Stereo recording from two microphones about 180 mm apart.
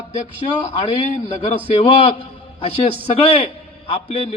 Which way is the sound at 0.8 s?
35° left (ahead or behind).